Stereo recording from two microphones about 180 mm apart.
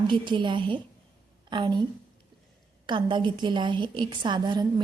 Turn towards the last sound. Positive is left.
turn(degrees=-25)  # may be behind; listen again after turning